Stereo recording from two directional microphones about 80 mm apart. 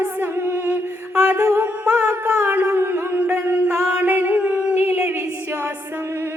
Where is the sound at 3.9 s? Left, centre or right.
Centre.